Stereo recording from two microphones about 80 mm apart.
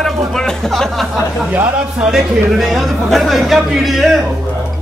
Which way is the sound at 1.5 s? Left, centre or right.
Right.